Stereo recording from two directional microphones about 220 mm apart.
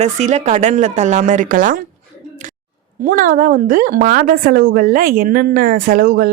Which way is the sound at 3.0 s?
40° right (ahead or behind).